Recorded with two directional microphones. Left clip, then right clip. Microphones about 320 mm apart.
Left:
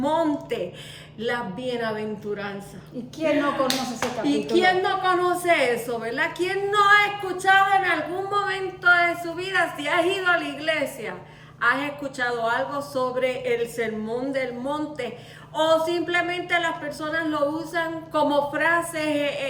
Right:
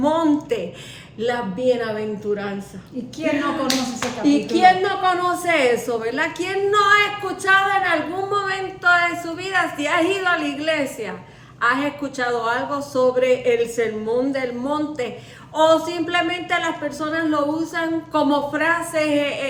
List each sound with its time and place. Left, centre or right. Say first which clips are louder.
0.0 s a sound: right 4 dB; centre
1.2 s a woman's voice: right 6 dB; centre
4.3 s a woman's voice: right 6 dB; centre